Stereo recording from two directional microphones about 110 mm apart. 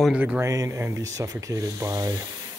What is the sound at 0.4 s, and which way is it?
Speech, 30° right (ahead or behind).